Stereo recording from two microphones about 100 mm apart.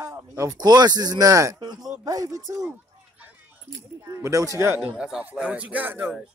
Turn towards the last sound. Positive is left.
turn(degrees=-20)  # may be behind; listen again after turning